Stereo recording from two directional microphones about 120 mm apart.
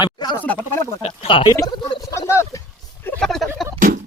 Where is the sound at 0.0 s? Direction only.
35° left (ahead or behind).